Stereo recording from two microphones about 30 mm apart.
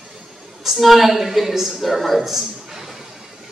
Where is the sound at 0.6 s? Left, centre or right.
Centre.